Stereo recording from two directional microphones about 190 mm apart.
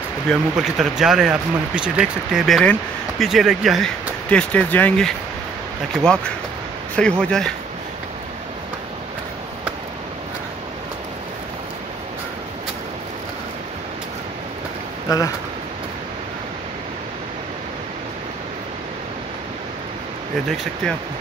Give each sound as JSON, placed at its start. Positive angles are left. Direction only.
{"t": 0.3, "sound": "speech", "side_deg": 0}
{"t": 7.0, "sound": "speech", "side_deg": 5}
{"t": 15.0, "sound": "speech", "side_deg": 20}